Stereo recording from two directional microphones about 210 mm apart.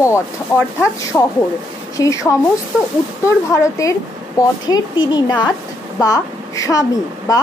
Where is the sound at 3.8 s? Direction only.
15° left (ahead or behind).